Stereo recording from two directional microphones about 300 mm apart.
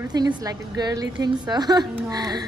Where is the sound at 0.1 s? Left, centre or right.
Centre.